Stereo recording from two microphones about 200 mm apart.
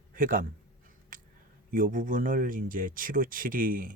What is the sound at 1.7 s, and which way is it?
Speech, 45° right (ahead or behind).